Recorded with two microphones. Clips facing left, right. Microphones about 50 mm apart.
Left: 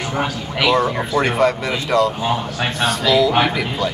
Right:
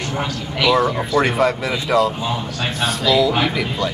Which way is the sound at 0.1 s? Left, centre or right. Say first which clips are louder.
Left 2 dB; left.